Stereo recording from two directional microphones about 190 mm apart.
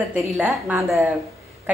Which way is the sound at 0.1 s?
10° right (ahead or behind).